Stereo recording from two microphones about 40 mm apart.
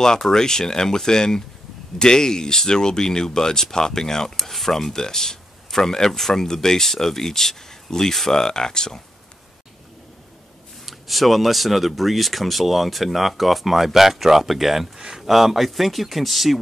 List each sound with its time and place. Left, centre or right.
0.0 s speech: centre
10.9 s speech: centre